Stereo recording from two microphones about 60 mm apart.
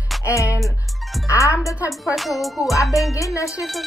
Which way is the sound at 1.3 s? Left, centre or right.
Left.